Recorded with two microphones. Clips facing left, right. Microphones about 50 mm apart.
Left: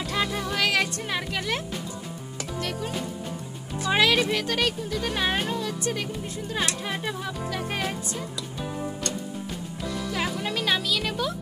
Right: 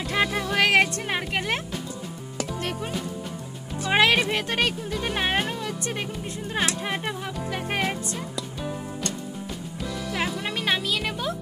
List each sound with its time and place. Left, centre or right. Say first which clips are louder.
0.1 s music: right 4 dB; right
3.8 s speech: right 1 dB; right
10.4 s music: even; right